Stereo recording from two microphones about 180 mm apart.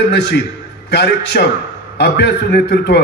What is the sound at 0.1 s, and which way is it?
A man's voice, 65° left (ahead or behind).